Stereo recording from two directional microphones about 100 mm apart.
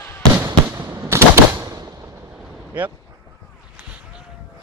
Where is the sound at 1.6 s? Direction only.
40° right (ahead or behind).